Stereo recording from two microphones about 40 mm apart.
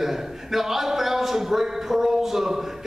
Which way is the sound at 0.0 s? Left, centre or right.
Centre.